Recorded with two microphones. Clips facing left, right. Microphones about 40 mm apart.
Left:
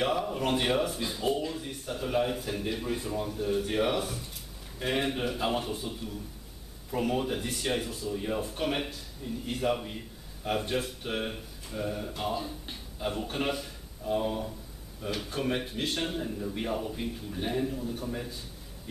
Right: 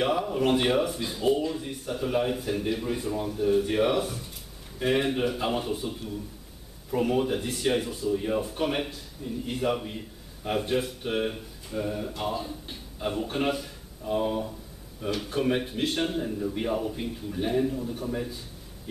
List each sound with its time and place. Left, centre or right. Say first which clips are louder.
0.0 s a man's voice: right 4 dB; centre